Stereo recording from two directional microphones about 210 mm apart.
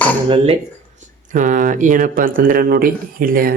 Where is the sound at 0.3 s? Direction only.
25° right (ahead or behind).